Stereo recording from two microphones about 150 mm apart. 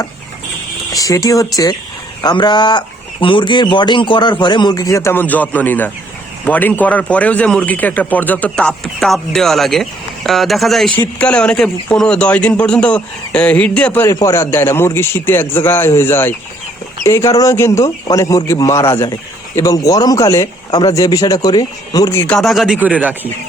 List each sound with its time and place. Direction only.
0.9 s speech: 25° left (ahead or behind)
22.3 s speech: centre (ahead or behind)